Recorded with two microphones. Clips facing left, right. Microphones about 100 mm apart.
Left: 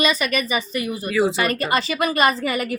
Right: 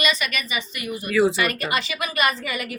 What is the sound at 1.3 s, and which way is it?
Speech, 35° left (ahead or behind).